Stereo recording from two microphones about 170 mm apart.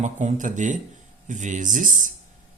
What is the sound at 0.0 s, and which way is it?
A man's voice, 45° right (ahead or behind).